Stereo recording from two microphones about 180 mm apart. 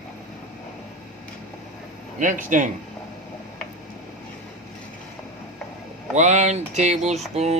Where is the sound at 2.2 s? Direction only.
45° right (ahead or behind).